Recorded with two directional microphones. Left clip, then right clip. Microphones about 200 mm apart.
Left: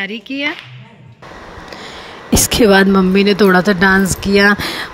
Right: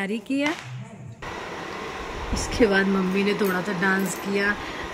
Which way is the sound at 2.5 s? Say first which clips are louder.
Left 10 dB; 50° left (ahead or behind).